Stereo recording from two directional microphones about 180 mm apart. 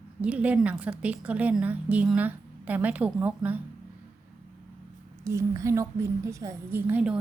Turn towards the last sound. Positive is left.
turn(degrees=-10)  # may be behind; listen again after turning